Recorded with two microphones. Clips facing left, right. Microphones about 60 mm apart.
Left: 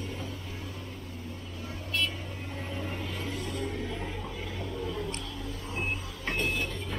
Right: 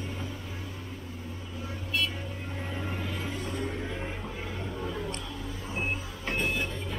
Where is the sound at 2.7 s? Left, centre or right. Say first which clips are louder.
Right 1 dB; centre.